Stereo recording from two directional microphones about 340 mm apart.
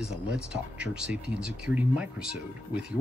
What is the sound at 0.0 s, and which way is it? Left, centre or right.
Speech, centre.